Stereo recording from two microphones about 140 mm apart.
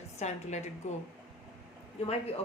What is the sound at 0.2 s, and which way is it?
Speech, 55° left (ahead or behind).